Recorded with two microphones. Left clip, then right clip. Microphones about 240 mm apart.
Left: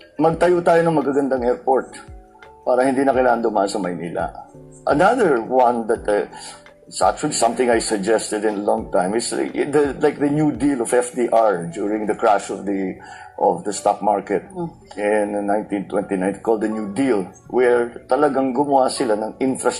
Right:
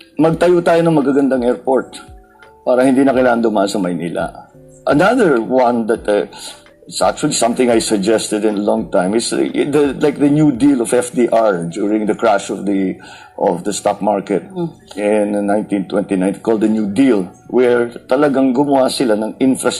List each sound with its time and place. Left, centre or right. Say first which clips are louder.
0.2 s speech: right 4 dB; right